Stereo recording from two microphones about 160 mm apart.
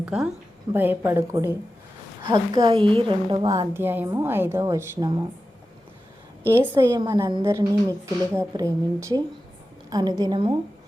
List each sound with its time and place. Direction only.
0.0 s a woman's voice: 5° right (ahead or behind)
2.2 s a woman's voice: 30° right (ahead or behind)
3.8 s a woman's voice: 15° right (ahead or behind)
6.7 s a woman's voice: 20° right (ahead or behind)